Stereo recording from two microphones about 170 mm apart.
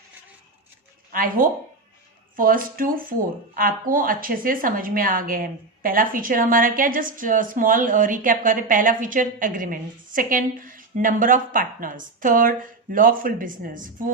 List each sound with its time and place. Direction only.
1.1 s speech: 55° right (ahead or behind)